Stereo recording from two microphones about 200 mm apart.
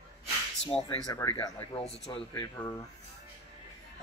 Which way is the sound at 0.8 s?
20° left (ahead or behind).